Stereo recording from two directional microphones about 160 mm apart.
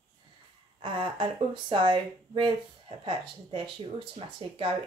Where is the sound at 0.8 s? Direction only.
30° right (ahead or behind).